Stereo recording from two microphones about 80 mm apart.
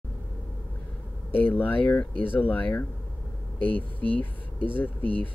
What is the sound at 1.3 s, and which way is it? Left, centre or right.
Speech, left.